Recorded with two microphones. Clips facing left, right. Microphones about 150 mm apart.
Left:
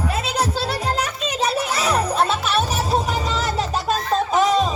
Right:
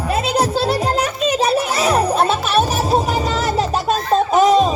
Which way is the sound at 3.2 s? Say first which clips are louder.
Right 4 dB; 10° right (ahead or behind).